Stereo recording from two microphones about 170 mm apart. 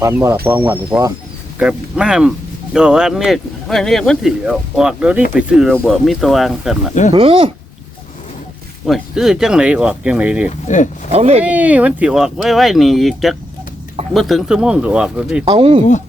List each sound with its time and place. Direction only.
0.0 s speech: 15° right (ahead or behind)
7.1 s speech: 30° right (ahead or behind)
8.9 s speech: centre (ahead or behind)
11.1 s speech: 40° right (ahead or behind)
11.4 s speech: 10° right (ahead or behind)
15.4 s speech: 30° right (ahead or behind)